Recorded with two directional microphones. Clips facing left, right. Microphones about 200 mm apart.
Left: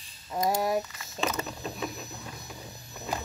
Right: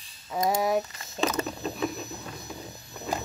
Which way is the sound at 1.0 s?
35° right (ahead or behind).